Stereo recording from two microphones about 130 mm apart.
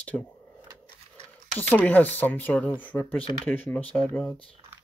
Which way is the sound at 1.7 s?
15° left (ahead or behind).